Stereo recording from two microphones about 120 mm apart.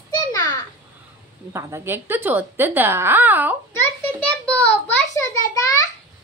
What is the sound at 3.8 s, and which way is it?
A child's voice, 10° left (ahead or behind).